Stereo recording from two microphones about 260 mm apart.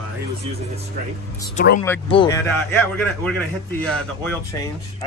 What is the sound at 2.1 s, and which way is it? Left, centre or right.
Speech, centre.